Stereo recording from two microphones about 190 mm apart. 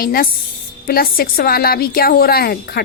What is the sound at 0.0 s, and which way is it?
A woman's voice, 50° left (ahead or behind).